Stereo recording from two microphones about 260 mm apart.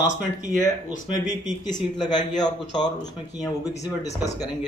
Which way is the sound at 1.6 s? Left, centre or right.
Centre.